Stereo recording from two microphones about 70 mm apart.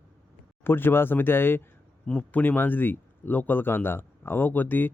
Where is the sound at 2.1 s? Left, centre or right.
Centre.